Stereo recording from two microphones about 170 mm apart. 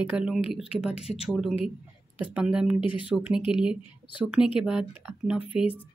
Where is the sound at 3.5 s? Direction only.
5° right (ahead or behind).